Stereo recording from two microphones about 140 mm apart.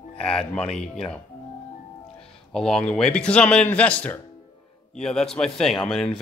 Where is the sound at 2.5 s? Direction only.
5° left (ahead or behind).